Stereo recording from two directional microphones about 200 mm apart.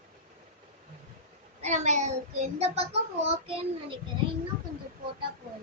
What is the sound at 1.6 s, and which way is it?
A child's voice, 35° right (ahead or behind).